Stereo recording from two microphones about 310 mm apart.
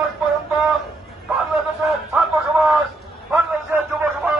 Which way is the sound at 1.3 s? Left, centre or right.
Centre.